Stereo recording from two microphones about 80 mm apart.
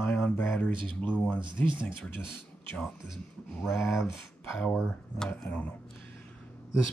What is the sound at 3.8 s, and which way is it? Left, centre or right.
Speech, left.